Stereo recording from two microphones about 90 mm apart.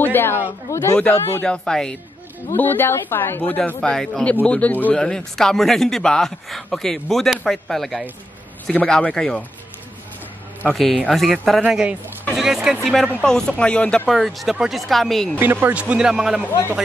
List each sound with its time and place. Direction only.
0.0 s speech: 25° left (ahead or behind)
1.4 s speech: 10° left (ahead or behind)
2.5 s speech: 20° left (ahead or behind)
4.9 s a man's voice: 5° left (ahead or behind)
10.7 s a man's voice: 5° left (ahead or behind)
11.6 s a man's voice: 10° right (ahead or behind); by 14.0 s 10° left (ahead or behind)
14.0 s a man's voice: centre (ahead or behind)
15.3 s speech: 25° right (ahead or behind); by 16.4 s 5° right (ahead or behind)